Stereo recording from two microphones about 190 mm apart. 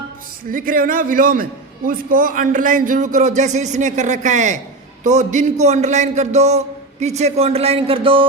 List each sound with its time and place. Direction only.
0.5 s a man's voice: 45° right (ahead or behind); by 8.3 s 25° right (ahead or behind)